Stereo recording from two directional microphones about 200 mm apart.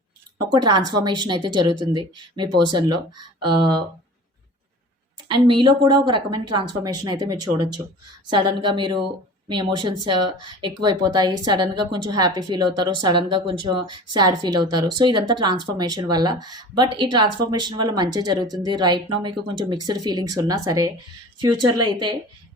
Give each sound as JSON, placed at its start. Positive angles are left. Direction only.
{"t": 0.3, "sound": "speech", "side_deg": -20}
{"t": 5.5, "sound": "speech", "side_deg": -20}